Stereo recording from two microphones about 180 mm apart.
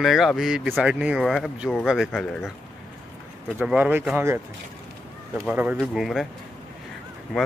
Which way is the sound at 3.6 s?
10° right (ahead or behind).